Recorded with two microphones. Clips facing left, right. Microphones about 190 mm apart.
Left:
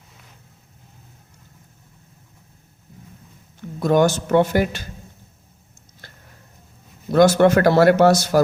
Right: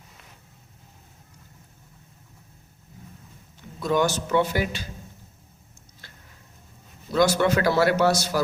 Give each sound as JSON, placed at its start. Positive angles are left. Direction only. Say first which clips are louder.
{"t": 3.8, "sound": "speech", "louder": "left 6 dB", "side_deg": 50}
{"t": 7.1, "sound": "speech", "louder": "left 7 dB", "side_deg": 50}